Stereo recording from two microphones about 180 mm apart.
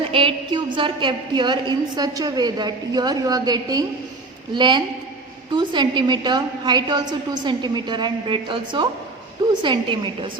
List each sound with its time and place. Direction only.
0.1 s a woman's voice: 30° right (ahead or behind)